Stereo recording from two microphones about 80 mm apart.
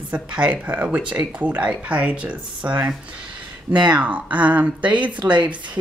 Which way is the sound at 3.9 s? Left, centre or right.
Centre.